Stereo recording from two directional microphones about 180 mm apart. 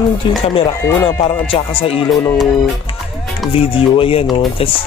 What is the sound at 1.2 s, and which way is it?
Speech, 30° left (ahead or behind).